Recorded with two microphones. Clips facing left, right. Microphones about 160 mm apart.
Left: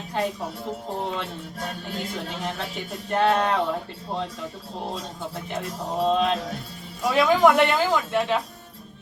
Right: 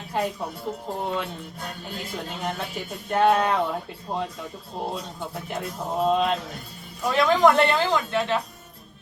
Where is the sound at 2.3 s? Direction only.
5° right (ahead or behind).